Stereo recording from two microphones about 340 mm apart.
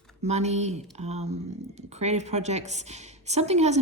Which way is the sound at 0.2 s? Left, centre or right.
Centre.